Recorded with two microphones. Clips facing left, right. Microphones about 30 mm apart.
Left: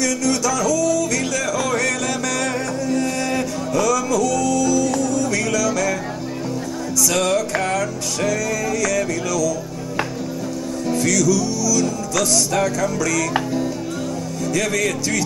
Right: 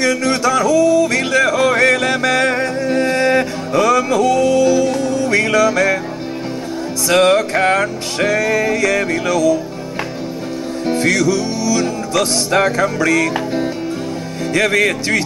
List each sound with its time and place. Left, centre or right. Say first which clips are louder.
0.0 s music: right 5 dB; right
7.1 s music: right 8 dB; right
10.9 s music: right 3 dB; right
14.5 s speech: right 7 dB; right